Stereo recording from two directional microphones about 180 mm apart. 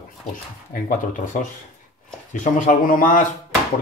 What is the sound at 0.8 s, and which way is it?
Speech, 45° left (ahead or behind).